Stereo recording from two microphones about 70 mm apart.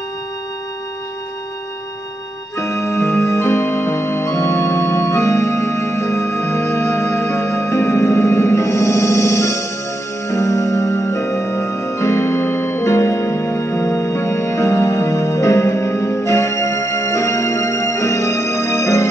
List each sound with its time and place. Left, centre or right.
2.6 s music: left